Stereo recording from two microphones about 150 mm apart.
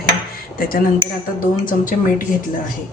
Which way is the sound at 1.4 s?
65° left (ahead or behind).